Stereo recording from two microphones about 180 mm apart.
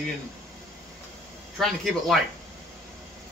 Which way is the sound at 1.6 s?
Centre (ahead or behind).